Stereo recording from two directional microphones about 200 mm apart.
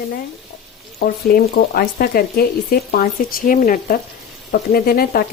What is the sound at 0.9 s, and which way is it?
Speech, 45° left (ahead or behind).